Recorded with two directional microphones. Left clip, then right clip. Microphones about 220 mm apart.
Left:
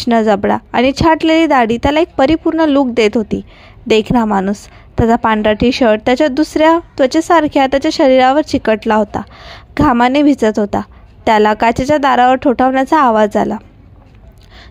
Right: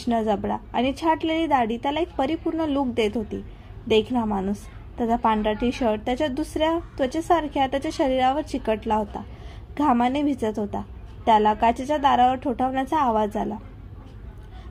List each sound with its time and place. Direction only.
0.0 s a woman's voice: 45° left (ahead or behind)